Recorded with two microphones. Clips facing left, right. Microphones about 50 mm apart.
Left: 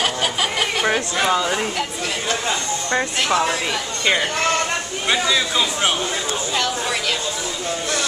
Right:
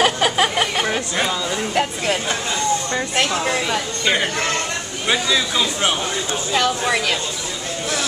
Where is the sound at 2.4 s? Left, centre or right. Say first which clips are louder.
Right 2 dB; left.